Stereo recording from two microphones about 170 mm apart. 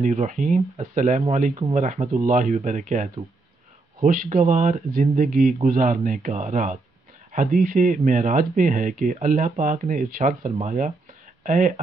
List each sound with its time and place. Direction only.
0.0 s speech: 45° right (ahead or behind)
1.5 s speech: 35° right (ahead or behind); by 10.3 s 55° right (ahead or behind)
10.4 s speech: 40° right (ahead or behind)
11.4 s speech: 50° right (ahead or behind)